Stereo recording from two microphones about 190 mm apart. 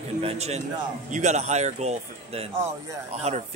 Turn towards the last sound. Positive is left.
turn(degrees=-35)  # may be behind; listen again after turning